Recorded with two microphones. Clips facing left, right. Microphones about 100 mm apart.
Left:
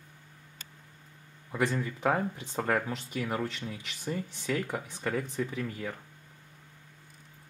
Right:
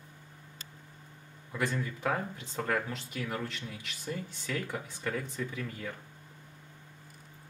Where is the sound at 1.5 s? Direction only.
20° left (ahead or behind).